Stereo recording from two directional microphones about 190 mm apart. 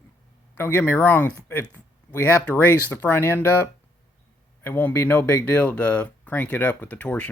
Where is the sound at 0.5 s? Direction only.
10° left (ahead or behind).